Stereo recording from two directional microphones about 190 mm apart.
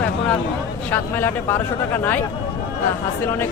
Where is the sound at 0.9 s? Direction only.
10° left (ahead or behind).